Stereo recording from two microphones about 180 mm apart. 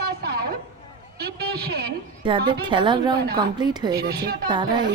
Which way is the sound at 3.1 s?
60° right (ahead or behind).